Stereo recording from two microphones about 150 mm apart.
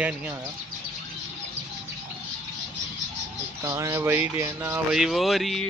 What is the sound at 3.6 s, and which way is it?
Speech, 20° right (ahead or behind).